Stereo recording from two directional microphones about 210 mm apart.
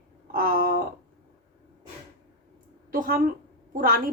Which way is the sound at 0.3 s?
45° right (ahead or behind).